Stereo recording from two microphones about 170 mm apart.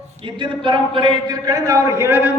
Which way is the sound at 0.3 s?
30° right (ahead or behind).